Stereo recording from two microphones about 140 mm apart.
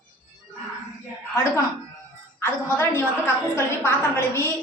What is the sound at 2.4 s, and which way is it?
A woman's voice, 15° left (ahead or behind).